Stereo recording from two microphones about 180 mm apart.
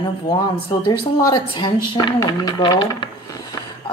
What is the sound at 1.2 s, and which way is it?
A woman's voice, 25° left (ahead or behind).